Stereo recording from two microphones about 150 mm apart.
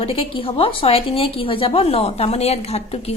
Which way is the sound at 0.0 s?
40° left (ahead or behind).